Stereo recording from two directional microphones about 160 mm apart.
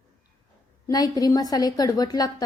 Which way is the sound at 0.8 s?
25° left (ahead or behind).